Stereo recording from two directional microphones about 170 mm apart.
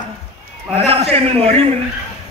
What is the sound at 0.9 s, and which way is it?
Speech, 35° right (ahead or behind).